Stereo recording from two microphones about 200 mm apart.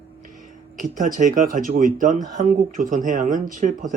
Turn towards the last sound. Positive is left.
turn(degrees=-40)  # may be behind; listen again after turning